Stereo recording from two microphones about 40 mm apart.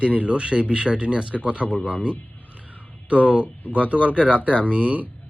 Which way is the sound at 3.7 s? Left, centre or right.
Right.